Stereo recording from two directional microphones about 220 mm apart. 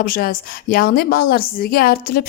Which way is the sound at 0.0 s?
40° left (ahead or behind).